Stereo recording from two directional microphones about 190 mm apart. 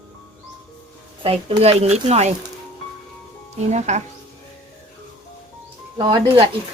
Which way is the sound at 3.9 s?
35° right (ahead or behind).